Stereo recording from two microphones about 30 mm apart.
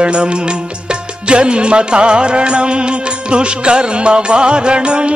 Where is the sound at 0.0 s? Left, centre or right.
Right.